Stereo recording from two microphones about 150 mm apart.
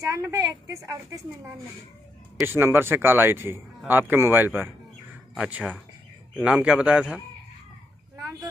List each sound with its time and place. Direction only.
0.0 s a woman's voice: 20° right (ahead or behind)